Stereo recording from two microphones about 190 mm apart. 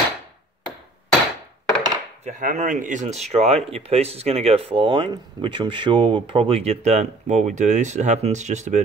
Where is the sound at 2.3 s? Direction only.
40° right (ahead or behind).